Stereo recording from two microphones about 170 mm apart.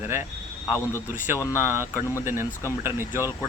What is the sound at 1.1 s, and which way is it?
A man's voice, 10° right (ahead or behind).